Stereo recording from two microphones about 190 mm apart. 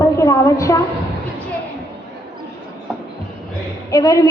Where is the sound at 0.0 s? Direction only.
15° left (ahead or behind).